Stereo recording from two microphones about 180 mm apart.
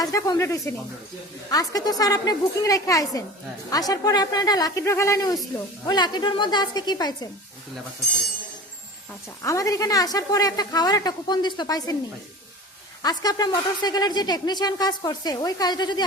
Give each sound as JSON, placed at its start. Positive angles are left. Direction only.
{"t": 0.0, "sound": "a woman's voice", "side_deg": 20}
{"t": 9.4, "sound": "a woman's voice", "side_deg": 20}
{"t": 13.0, "sound": "a woman's voice", "side_deg": 20}